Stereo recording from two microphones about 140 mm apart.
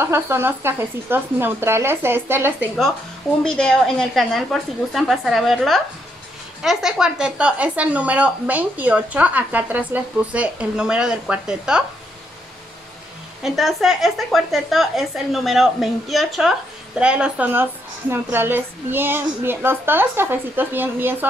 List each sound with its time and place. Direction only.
0.0 s speech: 15° right (ahead or behind)
3.4 s speech: 5° left (ahead or behind)
13.4 s speech: centre (ahead or behind)